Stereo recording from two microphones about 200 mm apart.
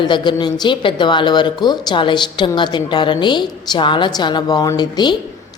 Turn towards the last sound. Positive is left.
turn(degrees=20)  # may be behind; listen again after turning